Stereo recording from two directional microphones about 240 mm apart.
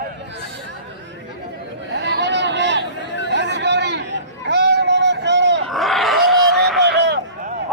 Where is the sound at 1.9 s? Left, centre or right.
Right.